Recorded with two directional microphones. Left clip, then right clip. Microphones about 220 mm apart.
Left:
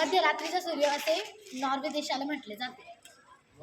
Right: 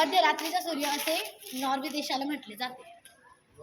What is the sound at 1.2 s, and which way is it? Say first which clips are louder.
Speech: right 2 dB; 40° right (ahead or behind).